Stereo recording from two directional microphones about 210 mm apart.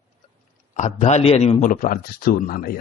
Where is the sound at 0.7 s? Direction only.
35° left (ahead or behind).